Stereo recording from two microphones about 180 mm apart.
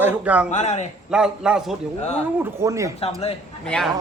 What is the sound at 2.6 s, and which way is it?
Speech, 15° right (ahead or behind).